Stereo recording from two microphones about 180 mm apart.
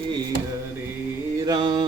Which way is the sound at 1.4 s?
25° right (ahead or behind).